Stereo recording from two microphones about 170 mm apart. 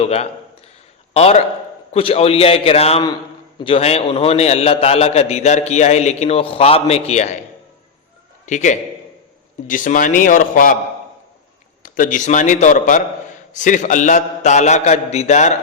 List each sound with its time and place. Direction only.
0.0 s a man's voice: 35° left (ahead or behind)
8.4 s a man's voice: 45° left (ahead or behind)
11.8 s a man's voice: 50° left (ahead or behind)